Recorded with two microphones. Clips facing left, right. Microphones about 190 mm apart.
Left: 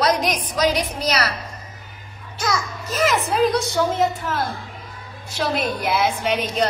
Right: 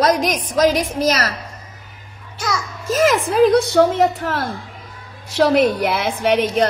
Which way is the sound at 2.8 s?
50° right (ahead or behind).